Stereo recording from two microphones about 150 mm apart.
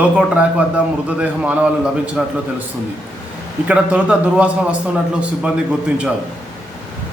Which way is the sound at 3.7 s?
10° right (ahead or behind).